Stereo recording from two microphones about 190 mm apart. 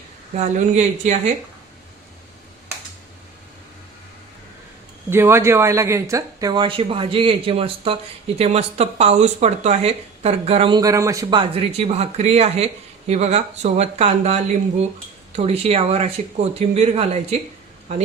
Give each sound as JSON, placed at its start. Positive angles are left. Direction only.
{"t": 0.3, "sound": "speech", "side_deg": -35}
{"t": 5.0, "sound": "speech", "side_deg": -10}